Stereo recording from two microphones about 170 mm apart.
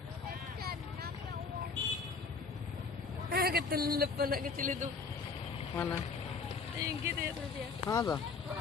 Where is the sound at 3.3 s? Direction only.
65° right (ahead or behind).